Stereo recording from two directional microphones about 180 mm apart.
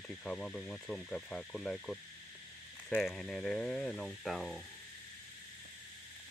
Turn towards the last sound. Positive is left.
turn(degrees=0)  # may be behind; listen again after turning